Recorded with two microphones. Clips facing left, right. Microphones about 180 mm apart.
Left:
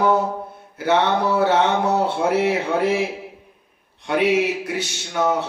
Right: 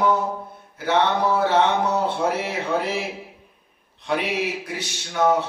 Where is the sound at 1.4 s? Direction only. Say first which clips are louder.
Left 2 dB; 60° left (ahead or behind).